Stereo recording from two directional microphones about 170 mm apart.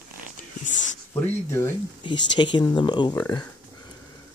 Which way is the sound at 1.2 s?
15° left (ahead or behind).